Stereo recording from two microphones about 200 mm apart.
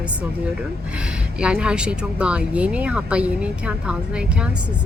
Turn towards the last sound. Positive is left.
turn(degrees=-5)  # may be behind; listen again after turning